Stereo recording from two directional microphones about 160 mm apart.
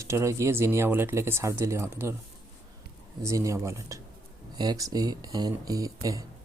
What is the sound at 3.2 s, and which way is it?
Speech, 20° right (ahead or behind).